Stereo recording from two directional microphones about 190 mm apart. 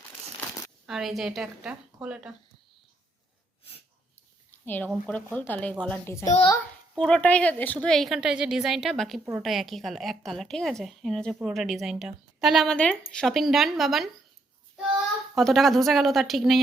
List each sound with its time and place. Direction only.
0.9 s a woman's voice: centre (ahead or behind)
4.6 s speech: 10° left (ahead or behind)
6.2 s a child's voice: 35° left (ahead or behind)
6.9 s a woman's voice: 5° left (ahead or behind)
15.4 s a woman's voice: centre (ahead or behind)